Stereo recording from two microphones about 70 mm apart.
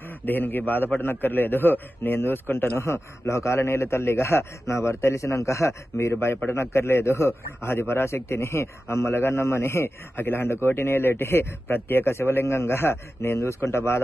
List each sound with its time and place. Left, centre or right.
0.2 s a man's voice: left